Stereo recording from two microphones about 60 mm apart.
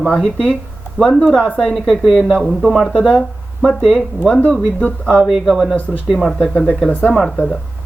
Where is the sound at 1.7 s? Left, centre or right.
Centre.